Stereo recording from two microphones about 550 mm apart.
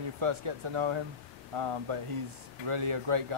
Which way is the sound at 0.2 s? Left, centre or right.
Right.